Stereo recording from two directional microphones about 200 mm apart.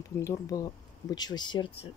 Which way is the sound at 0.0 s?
15° left (ahead or behind).